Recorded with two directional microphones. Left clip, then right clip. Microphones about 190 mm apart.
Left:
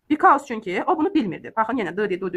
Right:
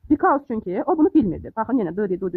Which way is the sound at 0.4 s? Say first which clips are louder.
Even; 50° right (ahead or behind).